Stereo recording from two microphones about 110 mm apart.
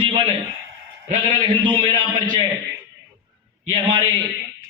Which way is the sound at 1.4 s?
45° right (ahead or behind).